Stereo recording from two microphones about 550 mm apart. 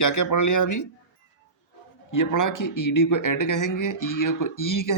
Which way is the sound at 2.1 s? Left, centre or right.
Left.